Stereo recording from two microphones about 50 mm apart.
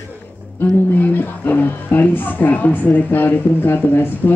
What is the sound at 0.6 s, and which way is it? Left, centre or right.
Speech, left.